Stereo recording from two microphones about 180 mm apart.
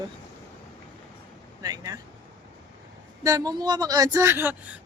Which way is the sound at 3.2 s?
20° right (ahead or behind).